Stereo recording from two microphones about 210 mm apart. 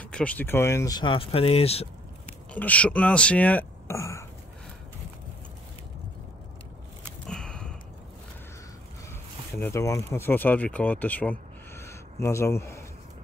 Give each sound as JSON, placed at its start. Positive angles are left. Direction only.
{"t": 0.0, "sound": "speech", "side_deg": 5}
{"t": 2.5, "sound": "speech", "side_deg": 5}
{"t": 7.2, "sound": "a sound", "side_deg": 5}
{"t": 9.1, "sound": "speech", "side_deg": 10}